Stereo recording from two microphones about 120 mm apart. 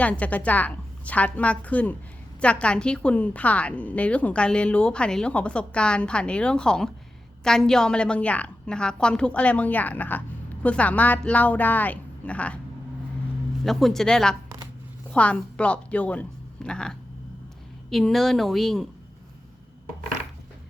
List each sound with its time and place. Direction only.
0.0 s a woman's voice: 10° left (ahead or behind)
13.7 s a woman's voice: centre (ahead or behind)